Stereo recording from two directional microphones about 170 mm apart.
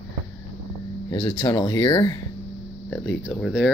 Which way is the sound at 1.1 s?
25° left (ahead or behind).